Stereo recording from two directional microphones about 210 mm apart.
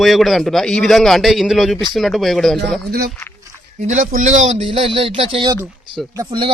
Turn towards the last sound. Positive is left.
turn(degrees=-20)  # may be behind; listen again after turning